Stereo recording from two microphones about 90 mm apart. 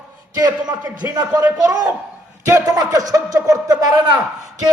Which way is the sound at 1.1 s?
45° right (ahead or behind).